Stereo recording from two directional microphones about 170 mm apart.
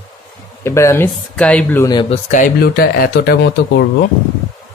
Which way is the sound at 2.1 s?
50° left (ahead or behind).